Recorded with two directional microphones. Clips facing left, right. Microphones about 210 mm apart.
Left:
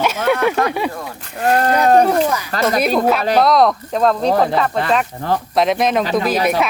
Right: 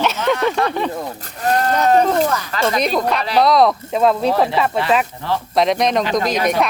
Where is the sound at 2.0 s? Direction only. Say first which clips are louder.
Left 1 dB; 10° left (ahead or behind).